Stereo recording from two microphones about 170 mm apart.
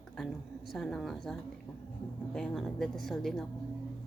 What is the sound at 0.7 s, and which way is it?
Speech, centre (ahead or behind).